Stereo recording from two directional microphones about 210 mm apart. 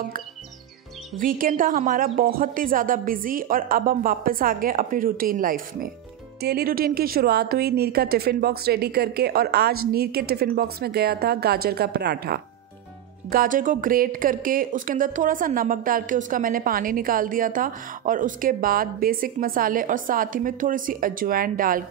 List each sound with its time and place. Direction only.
1.2 s a woman's voice: 40° right (ahead or behind)